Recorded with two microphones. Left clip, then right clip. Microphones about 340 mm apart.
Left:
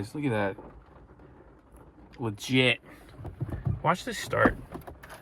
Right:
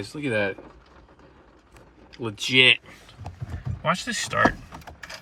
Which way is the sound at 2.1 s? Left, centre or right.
Centre.